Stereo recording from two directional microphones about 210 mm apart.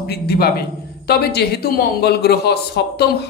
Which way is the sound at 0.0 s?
50° left (ahead or behind).